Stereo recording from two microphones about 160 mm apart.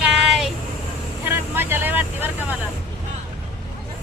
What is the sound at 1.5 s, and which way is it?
Speech, 15° right (ahead or behind).